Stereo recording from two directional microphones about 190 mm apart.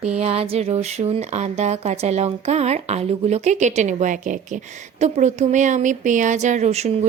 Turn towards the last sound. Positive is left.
turn(degrees=-35)  # may be behind; listen again after turning